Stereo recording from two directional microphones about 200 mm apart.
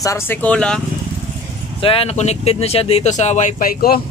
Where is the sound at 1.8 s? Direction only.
30° left (ahead or behind); by 4.0 s 50° left (ahead or behind).